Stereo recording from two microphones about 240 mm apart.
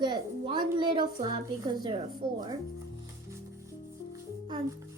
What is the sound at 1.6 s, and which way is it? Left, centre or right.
Child singing, centre.